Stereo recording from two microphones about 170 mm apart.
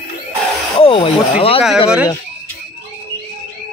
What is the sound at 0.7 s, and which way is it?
Speech, 35° left (ahead or behind).